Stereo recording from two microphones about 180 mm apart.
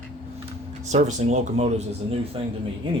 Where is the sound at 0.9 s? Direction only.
40° right (ahead or behind).